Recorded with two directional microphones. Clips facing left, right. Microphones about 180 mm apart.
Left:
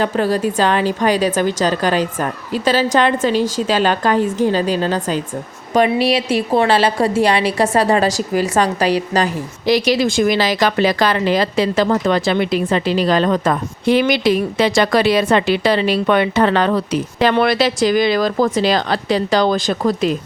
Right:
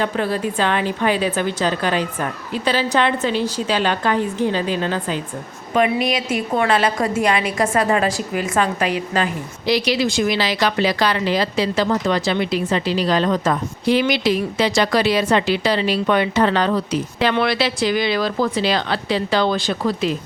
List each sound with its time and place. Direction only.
0.0 s a woman's voice: 40° left (ahead or behind); by 17.0 s 60° left (ahead or behind)
17.2 s a woman's voice: 45° left (ahead or behind)